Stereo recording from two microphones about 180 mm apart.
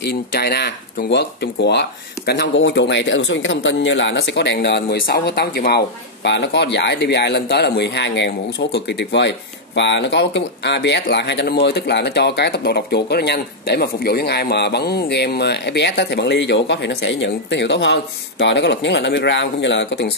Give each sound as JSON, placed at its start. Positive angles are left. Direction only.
{"t": 0.0, "sound": "speech", "side_deg": 65}
{"t": 6.2, "sound": "speech", "side_deg": 75}